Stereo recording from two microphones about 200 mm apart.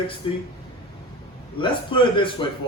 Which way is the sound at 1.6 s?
25° left (ahead or behind).